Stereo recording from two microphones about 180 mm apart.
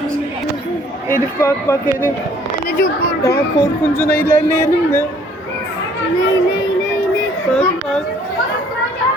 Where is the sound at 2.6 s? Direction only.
55° left (ahead or behind).